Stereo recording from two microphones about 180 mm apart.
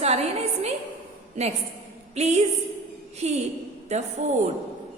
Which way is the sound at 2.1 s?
40° right (ahead or behind).